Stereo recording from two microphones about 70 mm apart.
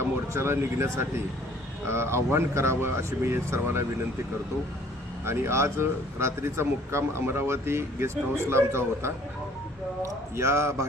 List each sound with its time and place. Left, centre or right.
0.0 s speech: right
5.2 s speech: right